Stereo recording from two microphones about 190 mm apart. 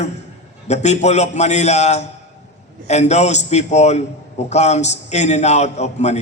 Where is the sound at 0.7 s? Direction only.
35° left (ahead or behind).